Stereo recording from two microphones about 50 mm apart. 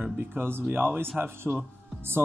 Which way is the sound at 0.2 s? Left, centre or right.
Right.